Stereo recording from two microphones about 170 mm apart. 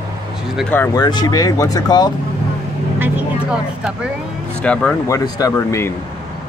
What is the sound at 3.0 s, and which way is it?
Speech, 5° right (ahead or behind).